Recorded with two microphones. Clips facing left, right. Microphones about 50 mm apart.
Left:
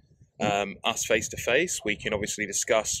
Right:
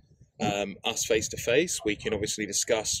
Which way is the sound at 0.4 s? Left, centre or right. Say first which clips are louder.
Left 3 dB; left.